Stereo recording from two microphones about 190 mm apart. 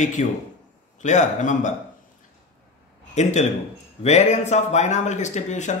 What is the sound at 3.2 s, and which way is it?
A man's voice, 35° left (ahead or behind).